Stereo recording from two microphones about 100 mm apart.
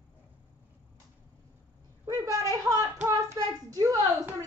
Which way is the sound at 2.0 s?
35° right (ahead or behind).